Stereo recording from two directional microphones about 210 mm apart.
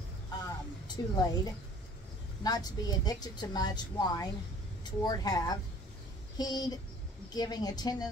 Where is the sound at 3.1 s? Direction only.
20° left (ahead or behind).